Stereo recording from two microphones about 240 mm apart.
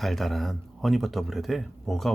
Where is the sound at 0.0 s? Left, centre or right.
Centre.